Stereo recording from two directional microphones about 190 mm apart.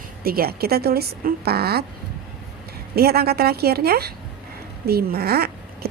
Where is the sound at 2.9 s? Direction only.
55° right (ahead or behind).